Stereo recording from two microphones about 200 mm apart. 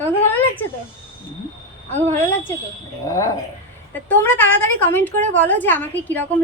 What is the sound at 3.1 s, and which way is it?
A woman's voice, 15° left (ahead or behind).